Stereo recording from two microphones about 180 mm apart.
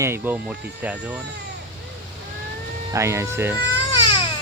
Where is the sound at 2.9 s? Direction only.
15° right (ahead or behind).